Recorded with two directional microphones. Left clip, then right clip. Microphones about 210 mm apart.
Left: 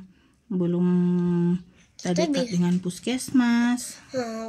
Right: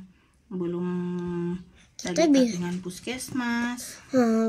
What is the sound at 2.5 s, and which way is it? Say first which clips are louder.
Speech: left 5 dB; 45° left (ahead or behind).